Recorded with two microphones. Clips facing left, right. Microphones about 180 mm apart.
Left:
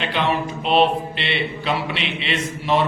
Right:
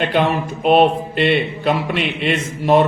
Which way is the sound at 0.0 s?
50° right (ahead or behind).